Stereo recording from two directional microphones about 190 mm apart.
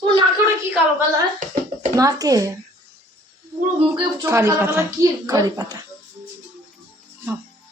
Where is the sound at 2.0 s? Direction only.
20° right (ahead or behind).